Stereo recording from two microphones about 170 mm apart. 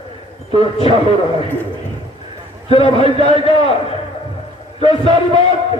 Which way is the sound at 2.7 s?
35° left (ahead or behind).